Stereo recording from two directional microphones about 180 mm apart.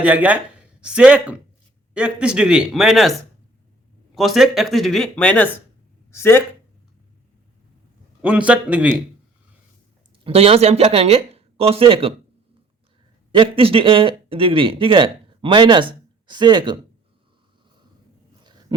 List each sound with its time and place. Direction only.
0.0 s speech: 10° right (ahead or behind); by 6.4 s 15° left (ahead or behind)
8.2 s a man's voice: 5° right (ahead or behind)
10.2 s speech: 30° right (ahead or behind)
13.3 s speech: 30° right (ahead or behind)